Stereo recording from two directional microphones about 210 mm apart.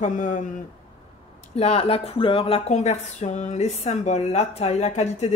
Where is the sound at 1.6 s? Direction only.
30° left (ahead or behind).